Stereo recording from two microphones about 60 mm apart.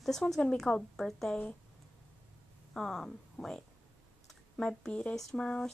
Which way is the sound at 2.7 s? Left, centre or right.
Centre.